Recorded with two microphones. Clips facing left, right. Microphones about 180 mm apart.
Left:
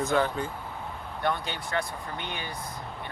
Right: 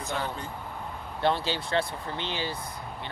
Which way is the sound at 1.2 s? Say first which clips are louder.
Right 3 dB; 30° right (ahead or behind).